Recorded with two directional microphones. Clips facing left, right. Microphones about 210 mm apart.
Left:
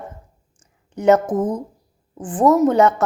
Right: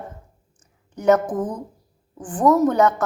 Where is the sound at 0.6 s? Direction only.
25° left (ahead or behind).